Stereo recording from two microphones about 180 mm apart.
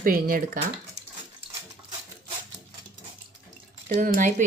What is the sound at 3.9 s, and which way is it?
Speech, 50° right (ahead or behind).